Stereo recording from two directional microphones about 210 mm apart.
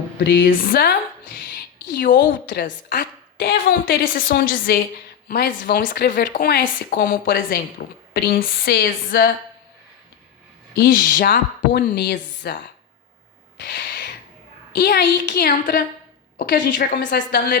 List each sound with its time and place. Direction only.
0.3 s a woman's voice: 45° left (ahead or behind)
10.8 s speech: 45° left (ahead or behind)
13.6 s owl: 50° left (ahead or behind)
14.8 s speech: 45° left (ahead or behind)
17.0 s speech: 55° left (ahead or behind)